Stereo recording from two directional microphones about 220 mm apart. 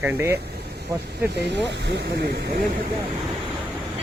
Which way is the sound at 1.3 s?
50° right (ahead or behind).